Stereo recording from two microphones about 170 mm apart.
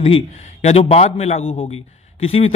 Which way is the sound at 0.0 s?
35° left (ahead or behind).